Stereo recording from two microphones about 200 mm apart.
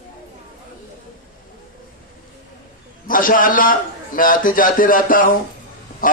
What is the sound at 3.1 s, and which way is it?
A man's voice, 45° left (ahead or behind).